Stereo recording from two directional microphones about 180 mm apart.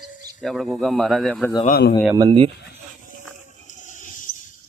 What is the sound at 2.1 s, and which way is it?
Speech, 25° right (ahead or behind).